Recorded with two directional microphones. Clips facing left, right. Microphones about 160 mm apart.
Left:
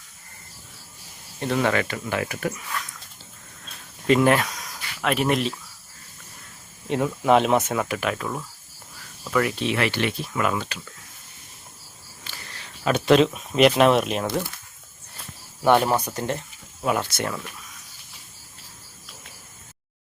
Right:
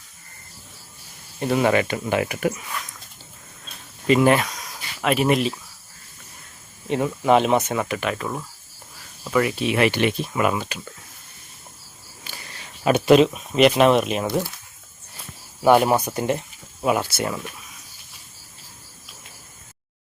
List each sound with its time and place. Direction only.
1.4 s speech: 10° right (ahead or behind)
4.0 s a sound: 5° right (ahead or behind)
4.9 s speech: 5° right (ahead or behind)
6.8 s speech: centre (ahead or behind)
9.7 s speech: 15° right (ahead or behind)
12.8 s speech: 10° right (ahead or behind)
15.6 s speech: 10° right (ahead or behind)